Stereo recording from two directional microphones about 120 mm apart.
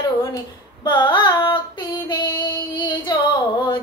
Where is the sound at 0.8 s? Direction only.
40° left (ahead or behind).